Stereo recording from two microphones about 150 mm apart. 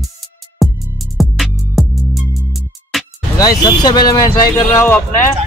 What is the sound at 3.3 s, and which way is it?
Speech, 25° left (ahead or behind).